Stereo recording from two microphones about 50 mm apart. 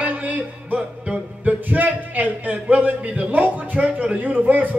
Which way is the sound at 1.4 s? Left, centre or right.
Right.